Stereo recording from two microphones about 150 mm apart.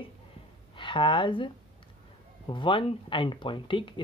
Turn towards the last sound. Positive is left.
turn(degrees=35)  # may be behind; listen again after turning